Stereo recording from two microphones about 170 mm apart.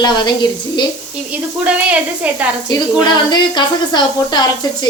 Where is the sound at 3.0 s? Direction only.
25° left (ahead or behind).